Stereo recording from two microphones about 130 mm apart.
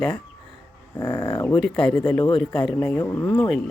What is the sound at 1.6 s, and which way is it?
A woman's voice, 5° left (ahead or behind).